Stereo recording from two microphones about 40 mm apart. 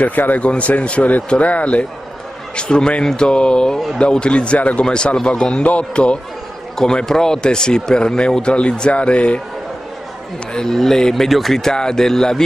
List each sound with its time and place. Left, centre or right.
0.0 s speech: left
0.4 s speech: left
4.8 s speech: left
6.8 s speech: centre
10.5 s speech: centre
11.5 s speech: centre